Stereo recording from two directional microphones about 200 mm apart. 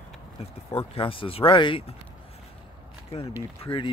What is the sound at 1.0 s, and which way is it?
Speech, 25° left (ahead or behind).